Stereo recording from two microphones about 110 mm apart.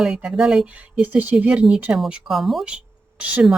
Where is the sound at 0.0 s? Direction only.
5° right (ahead or behind).